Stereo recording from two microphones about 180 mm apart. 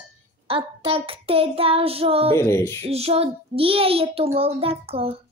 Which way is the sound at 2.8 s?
35° right (ahead or behind).